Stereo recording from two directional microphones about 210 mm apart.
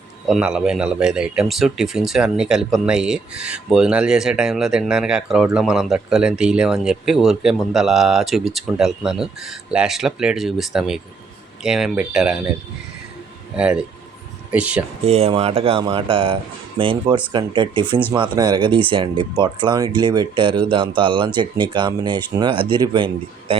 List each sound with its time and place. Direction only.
0.3 s speech: 5° right (ahead or behind)
13.6 s speech: 5° right (ahead or behind)
15.0 s speech: 30° right (ahead or behind)